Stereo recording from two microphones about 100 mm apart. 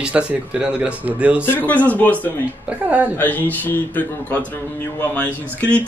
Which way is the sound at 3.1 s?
20° left (ahead or behind).